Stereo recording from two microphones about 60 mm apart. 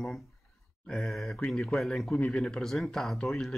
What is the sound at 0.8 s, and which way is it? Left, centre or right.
Speech, centre.